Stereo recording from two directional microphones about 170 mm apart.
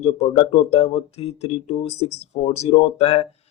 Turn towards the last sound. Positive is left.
turn(degrees=40)  # may be behind; listen again after turning